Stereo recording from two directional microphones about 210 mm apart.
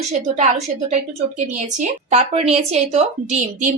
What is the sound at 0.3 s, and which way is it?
A woman's voice, 35° right (ahead or behind).